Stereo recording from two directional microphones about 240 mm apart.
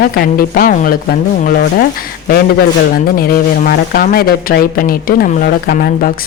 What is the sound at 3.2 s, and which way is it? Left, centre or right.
Speech, left.